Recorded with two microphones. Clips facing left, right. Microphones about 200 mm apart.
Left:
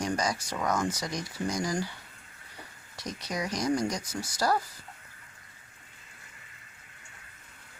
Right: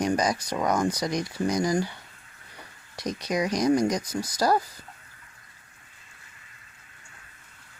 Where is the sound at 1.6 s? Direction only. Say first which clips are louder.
Right 7 dB; 10° right (ahead or behind).